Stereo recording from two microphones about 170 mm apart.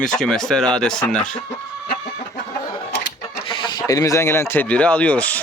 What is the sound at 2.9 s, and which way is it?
Sewing machine, 75° left (ahead or behind).